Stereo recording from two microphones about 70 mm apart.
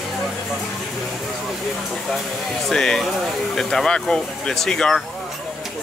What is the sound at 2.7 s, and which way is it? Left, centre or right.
Speech, centre.